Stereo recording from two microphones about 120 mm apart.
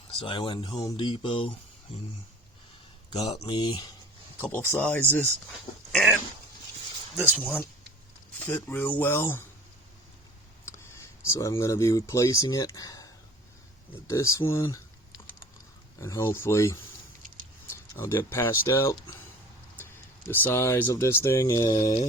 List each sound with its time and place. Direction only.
0.2 s speech: 45° left (ahead or behind)
3.4 s speech: 40° left (ahead or behind)
4.4 s speech: 15° left (ahead or behind)
7.2 s speech: 15° right (ahead or behind)
8.4 s speech: 15° left (ahead or behind)
10.7 s speech: 25° left (ahead or behind)
14.1 s speech: 25° left (ahead or behind)
16.0 s speech: 25° left (ahead or behind)
21.7 s speech: 40° left (ahead or behind)